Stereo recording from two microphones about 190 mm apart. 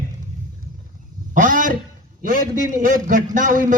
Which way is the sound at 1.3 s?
45° right (ahead or behind).